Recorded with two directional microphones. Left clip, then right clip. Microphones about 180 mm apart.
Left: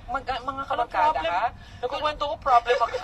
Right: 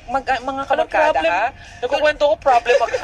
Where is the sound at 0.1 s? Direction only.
30° right (ahead or behind).